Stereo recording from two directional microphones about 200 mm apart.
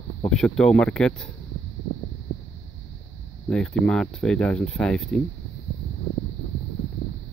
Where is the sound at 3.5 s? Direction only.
5° left (ahead or behind).